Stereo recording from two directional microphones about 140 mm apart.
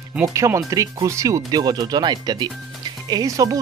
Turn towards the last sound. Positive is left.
turn(degrees=-25)  # may be behind; listen again after turning